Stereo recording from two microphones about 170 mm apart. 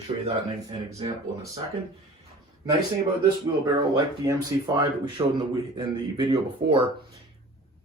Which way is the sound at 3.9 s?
20° right (ahead or behind).